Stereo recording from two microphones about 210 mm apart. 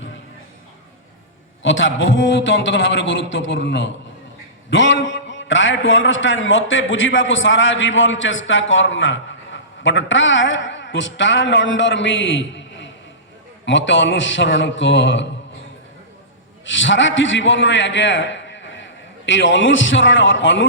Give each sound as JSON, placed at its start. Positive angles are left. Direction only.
{"t": 1.6, "sound": "a man's voice", "side_deg": 65}
{"t": 16.6, "sound": "a man's voice", "side_deg": 60}